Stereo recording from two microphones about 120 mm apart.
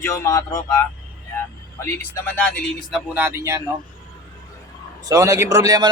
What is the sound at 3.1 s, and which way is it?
Speech, 20° right (ahead or behind).